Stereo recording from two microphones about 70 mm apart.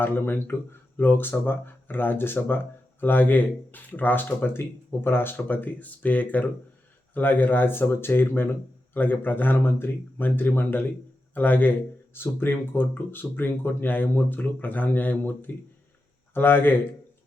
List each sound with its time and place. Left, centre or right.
0.0 s speech: left